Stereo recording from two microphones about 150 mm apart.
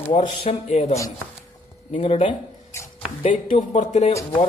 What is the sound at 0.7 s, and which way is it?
Speech, 50° left (ahead or behind).